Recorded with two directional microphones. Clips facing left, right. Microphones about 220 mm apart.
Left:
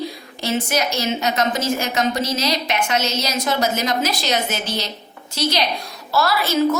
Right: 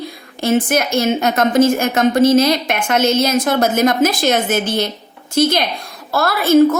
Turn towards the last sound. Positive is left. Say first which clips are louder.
# right 7 dB
turn(degrees=-50)  # may be behind; listen again after turning